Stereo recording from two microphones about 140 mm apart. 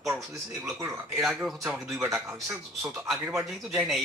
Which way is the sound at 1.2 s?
Centre (ahead or behind).